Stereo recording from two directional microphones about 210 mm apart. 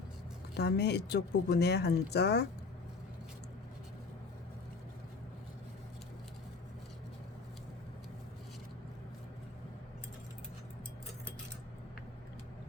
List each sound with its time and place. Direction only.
0.5 s speech: 50° left (ahead or behind)